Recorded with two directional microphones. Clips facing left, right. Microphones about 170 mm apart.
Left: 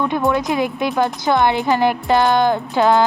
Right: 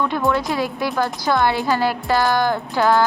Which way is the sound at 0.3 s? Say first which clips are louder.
Left 2 dB; 20° left (ahead or behind).